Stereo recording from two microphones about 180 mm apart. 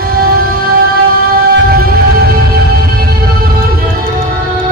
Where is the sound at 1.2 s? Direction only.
60° right (ahead or behind).